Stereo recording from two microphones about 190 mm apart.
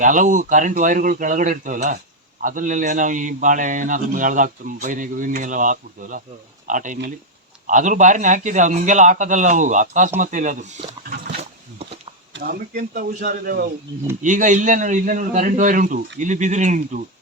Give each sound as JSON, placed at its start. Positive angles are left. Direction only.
{"t": 0.0, "sound": "a man's voice", "side_deg": -45}
{"t": 12.3, "sound": "a man's voice", "side_deg": -50}